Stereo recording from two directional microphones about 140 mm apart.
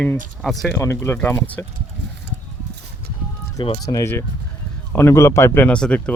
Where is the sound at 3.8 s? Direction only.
20° left (ahead or behind).